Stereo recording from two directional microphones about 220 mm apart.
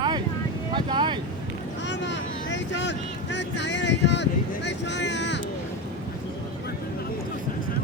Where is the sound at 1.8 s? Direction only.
55° left (ahead or behind).